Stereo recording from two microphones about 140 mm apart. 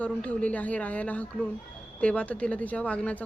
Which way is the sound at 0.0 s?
10° left (ahead or behind).